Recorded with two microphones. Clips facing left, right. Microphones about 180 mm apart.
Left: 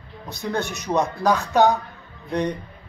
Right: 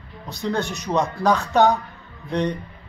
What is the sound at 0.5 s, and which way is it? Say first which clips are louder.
Speech: left 2 dB; 10° right (ahead or behind).